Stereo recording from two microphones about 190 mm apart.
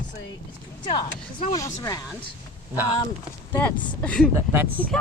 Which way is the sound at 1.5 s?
15° left (ahead or behind).